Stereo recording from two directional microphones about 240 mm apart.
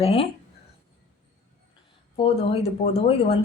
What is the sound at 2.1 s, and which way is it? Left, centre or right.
A woman's voice, left.